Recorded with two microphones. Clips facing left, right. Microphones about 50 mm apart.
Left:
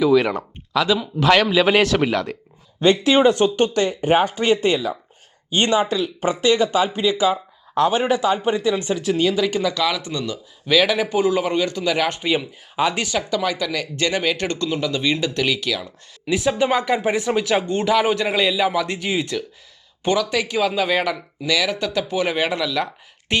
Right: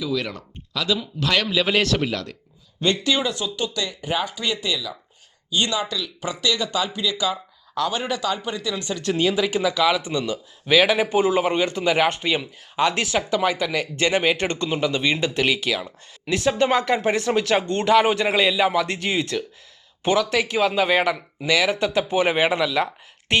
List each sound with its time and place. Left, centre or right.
0.0 s speech: left
3.1 s speech: left
9.0 s speech: centre; by 12.0 s right
12.0 s speech: centre
13.3 s speech: centre
16.3 s speech: centre
21.4 s speech: centre
23.3 s speech: centre